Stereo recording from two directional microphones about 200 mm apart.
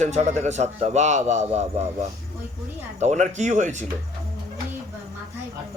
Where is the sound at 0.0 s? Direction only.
35° right (ahead or behind).